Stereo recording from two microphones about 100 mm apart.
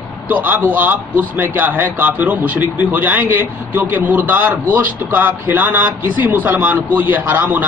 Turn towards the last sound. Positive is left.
turn(degrees=-20)  # may be behind; listen again after turning